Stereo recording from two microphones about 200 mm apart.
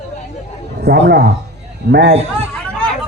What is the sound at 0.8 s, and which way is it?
A man's voice, 55° right (ahead or behind).